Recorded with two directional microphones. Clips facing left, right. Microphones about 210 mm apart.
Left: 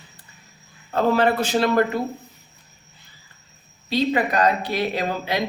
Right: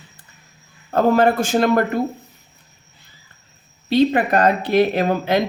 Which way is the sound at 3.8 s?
55° right (ahead or behind).